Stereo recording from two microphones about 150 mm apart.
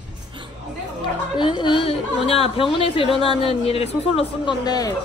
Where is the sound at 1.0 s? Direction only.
30° left (ahead or behind).